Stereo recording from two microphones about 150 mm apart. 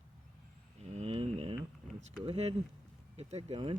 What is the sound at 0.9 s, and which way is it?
Speech, 45° right (ahead or behind).